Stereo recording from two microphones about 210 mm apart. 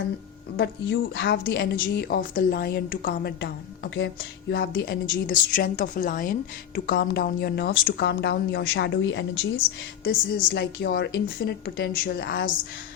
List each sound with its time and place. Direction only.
0.5 s a woman's voice: 55° left (ahead or behind)
10.0 s a woman's voice: 45° left (ahead or behind)